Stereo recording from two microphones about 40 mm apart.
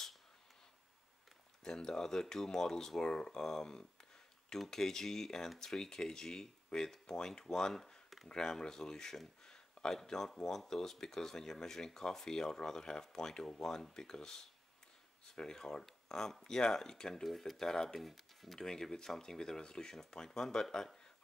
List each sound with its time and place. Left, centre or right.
1.6 s speech: centre
3.0 s speech: left
3.3 s a sound: centre
4.6 s speech: centre
8.3 s speech: centre
15.3 s speech: centre
18.0 s speech: centre
18.6 s speech: centre